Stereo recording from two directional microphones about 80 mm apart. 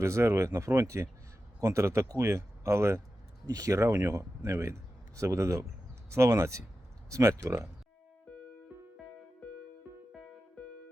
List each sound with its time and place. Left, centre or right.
0.0 s speech: right
3.4 s a man's voice: right